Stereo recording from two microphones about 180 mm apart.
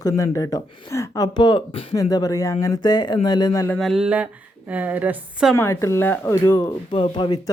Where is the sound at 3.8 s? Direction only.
Centre (ahead or behind).